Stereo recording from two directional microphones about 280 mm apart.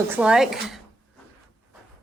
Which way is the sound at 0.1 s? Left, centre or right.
Centre.